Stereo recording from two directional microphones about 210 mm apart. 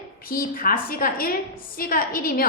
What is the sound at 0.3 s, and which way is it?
A woman's voice, 45° left (ahead or behind).